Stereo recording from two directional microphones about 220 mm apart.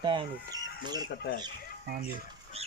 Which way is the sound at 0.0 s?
20° right (ahead or behind).